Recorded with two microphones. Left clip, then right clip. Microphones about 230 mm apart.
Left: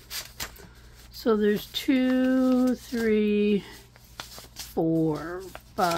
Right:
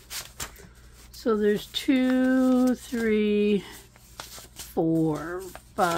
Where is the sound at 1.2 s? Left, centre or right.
Centre.